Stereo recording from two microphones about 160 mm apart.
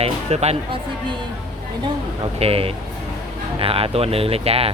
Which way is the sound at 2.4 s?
35° right (ahead or behind).